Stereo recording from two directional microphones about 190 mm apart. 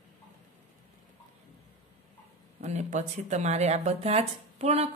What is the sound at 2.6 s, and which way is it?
Speech, 35° right (ahead or behind).